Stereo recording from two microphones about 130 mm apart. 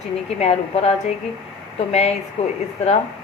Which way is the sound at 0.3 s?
55° left (ahead or behind).